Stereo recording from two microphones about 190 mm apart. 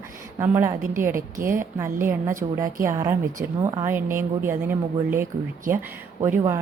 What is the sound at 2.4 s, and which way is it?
Speech, 25° right (ahead or behind).